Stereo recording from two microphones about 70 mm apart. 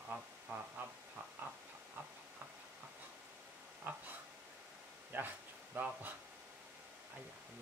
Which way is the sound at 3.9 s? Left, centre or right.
Right.